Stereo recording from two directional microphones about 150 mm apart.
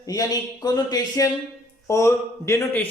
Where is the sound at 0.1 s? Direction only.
25° left (ahead or behind).